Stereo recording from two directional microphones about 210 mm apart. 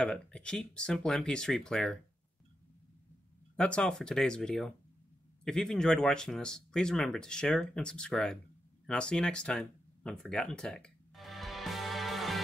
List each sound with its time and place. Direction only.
0.0 s speech: 5° left (ahead or behind)
3.5 s speech: 5° left (ahead or behind)
8.8 s a sound: 5° left (ahead or behind)